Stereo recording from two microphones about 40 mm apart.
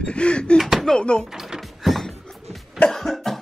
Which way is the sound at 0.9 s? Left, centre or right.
Left.